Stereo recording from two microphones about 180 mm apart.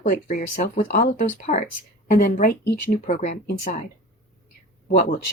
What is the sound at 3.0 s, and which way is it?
Speech, 40° left (ahead or behind).